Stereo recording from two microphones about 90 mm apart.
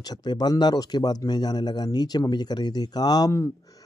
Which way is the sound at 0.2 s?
50° left (ahead or behind).